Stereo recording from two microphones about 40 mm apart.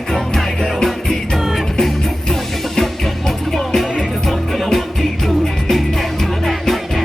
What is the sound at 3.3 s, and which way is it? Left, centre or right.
Music, centre.